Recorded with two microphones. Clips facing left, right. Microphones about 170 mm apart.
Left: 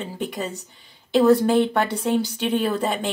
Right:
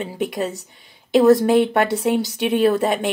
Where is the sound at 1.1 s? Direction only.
10° right (ahead or behind).